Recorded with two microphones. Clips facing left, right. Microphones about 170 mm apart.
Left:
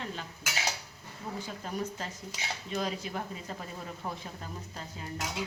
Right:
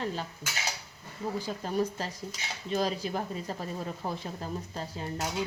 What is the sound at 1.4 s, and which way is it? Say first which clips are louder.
Speech: right 6 dB; 35° right (ahead or behind).